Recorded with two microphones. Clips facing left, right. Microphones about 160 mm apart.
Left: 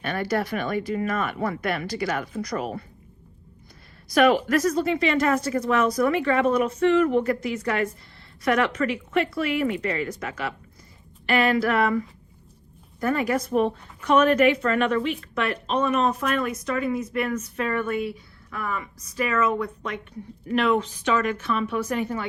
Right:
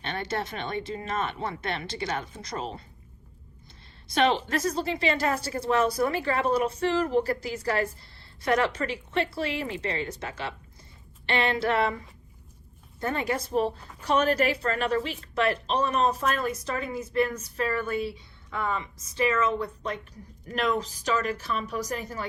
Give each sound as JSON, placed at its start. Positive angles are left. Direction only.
{"t": 0.0, "sound": "speech", "side_deg": -25}
{"t": 4.1, "sound": "speech", "side_deg": -25}
{"t": 13.0, "sound": "speech", "side_deg": -30}